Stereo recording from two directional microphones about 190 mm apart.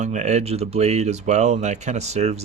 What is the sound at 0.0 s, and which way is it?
Speech, 40° right (ahead or behind).